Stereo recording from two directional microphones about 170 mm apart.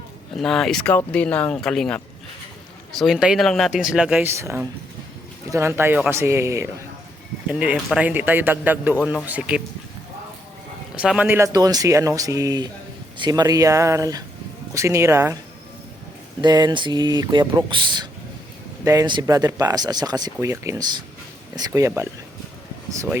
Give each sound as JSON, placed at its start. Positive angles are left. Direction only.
{"t": 0.3, "sound": "speech", "side_deg": 0}
{"t": 3.0, "sound": "a man's voice", "side_deg": -5}
{"t": 10.9, "sound": "a man's voice", "side_deg": -5}
{"t": 16.4, "sound": "a man's voice", "side_deg": -25}